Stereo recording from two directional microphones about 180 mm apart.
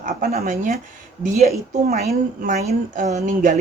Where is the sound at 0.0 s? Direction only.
45° right (ahead or behind).